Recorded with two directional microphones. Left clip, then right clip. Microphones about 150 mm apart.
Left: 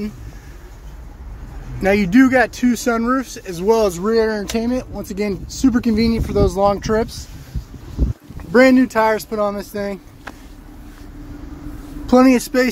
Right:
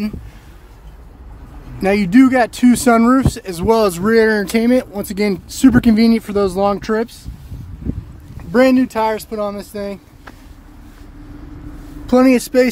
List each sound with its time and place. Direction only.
1.8 s speech: 25° right (ahead or behind)
8.5 s speech: 20° right (ahead or behind)
8.9 s speech: centre (ahead or behind)
12.1 s speech: 25° right (ahead or behind)